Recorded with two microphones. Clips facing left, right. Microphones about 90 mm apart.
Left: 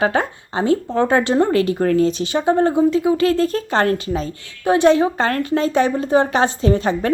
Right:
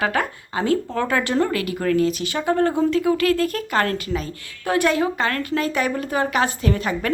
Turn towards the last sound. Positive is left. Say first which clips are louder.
# left 5 dB
turn(degrees=30)  # may be behind; listen again after turning